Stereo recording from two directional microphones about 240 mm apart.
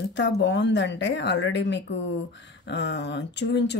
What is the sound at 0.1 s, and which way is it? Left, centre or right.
Speech, left.